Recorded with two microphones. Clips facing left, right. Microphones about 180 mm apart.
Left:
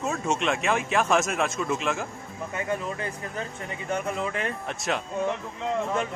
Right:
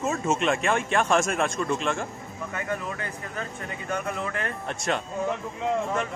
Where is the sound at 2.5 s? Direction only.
25° left (ahead or behind).